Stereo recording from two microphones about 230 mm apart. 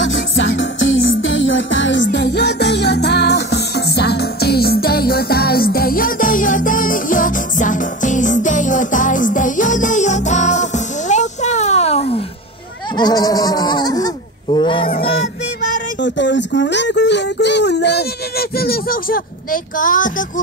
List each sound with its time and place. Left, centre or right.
0.0 s music: left
12.9 s goat: centre
15.0 s music: left
16.0 s a sound: left